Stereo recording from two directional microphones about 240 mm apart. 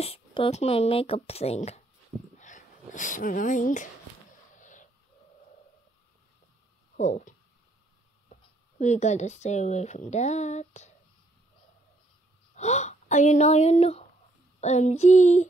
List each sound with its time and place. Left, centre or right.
0.0 s speech: left
2.3 s a sound: left
7.0 s speech: left
12.5 s speech: left